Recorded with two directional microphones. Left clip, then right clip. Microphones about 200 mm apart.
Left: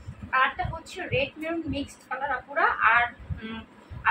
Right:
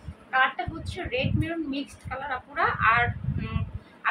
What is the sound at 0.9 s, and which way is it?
A woman's voice, 10° right (ahead or behind).